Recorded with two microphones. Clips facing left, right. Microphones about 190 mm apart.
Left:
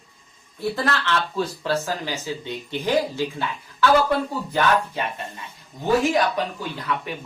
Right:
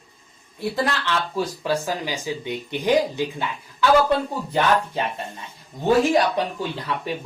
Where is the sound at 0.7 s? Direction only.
15° right (ahead or behind).